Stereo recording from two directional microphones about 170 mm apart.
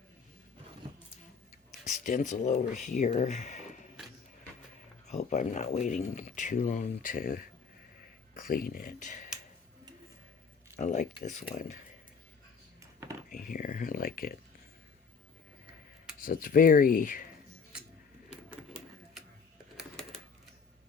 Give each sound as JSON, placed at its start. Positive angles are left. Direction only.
{"t": 1.9, "sound": "speech", "side_deg": 45}
{"t": 5.0, "sound": "speech", "side_deg": 45}
{"t": 10.8, "sound": "speech", "side_deg": 45}
{"t": 13.3, "sound": "speech", "side_deg": 50}
{"t": 16.2, "sound": "speech", "side_deg": 55}
{"t": 19.7, "sound": "typewriter", "side_deg": 0}